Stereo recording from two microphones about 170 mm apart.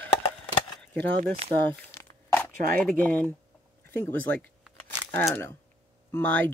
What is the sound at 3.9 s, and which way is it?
Speech, 10° left (ahead or behind).